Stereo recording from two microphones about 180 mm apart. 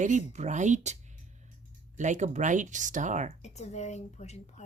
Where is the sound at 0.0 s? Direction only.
40° right (ahead or behind).